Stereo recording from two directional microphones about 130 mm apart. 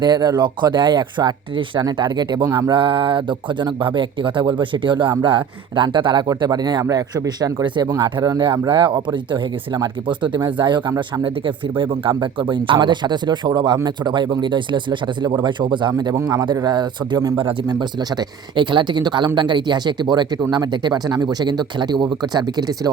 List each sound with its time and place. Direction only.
0.0 s speech: 35° right (ahead or behind)